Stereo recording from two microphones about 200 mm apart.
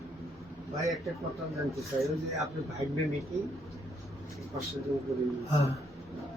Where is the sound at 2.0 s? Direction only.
Centre (ahead or behind).